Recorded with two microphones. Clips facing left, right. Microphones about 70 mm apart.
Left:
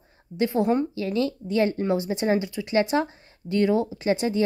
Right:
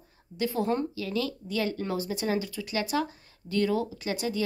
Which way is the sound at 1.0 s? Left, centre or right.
Left.